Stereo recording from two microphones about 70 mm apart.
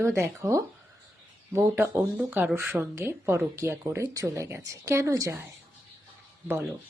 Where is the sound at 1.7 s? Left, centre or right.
Right.